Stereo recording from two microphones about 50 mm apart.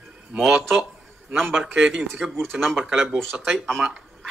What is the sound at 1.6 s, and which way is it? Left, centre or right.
A man's voice, right.